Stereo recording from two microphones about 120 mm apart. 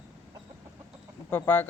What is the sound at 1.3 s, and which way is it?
Speech, 15° left (ahead or behind).